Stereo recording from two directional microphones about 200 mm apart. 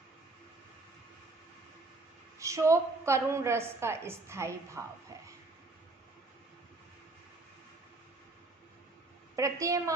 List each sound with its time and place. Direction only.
2.4 s a woman's voice: 15° right (ahead or behind)
9.3 s a woman's voice: 15° right (ahead or behind)